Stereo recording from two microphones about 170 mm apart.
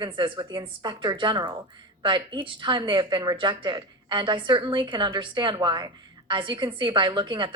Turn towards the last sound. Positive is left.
turn(degrees=-25)  # may be behind; listen again after turning